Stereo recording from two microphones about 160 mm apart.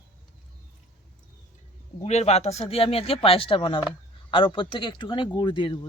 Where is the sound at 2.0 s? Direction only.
40° left (ahead or behind).